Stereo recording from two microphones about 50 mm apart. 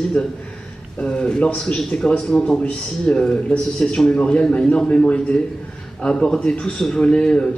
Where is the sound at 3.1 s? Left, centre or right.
Left.